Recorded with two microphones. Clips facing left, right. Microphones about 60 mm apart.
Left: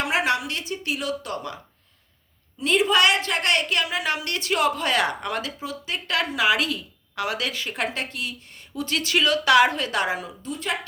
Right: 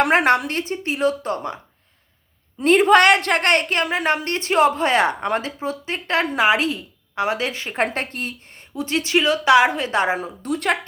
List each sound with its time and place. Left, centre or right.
0.0 s speech: right
2.6 s speech: right
8.7 s a woman's voice: right
10.4 s speech: right